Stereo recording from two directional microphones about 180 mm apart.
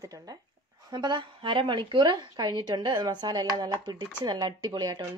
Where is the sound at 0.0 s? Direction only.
20° right (ahead or behind).